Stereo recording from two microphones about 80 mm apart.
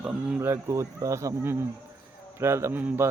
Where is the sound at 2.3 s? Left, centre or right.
Right.